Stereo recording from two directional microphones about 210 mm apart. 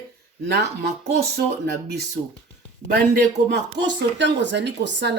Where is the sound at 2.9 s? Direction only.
50° right (ahead or behind).